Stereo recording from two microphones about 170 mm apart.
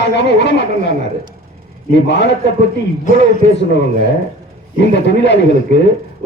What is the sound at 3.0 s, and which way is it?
Speech, 50° left (ahead or behind).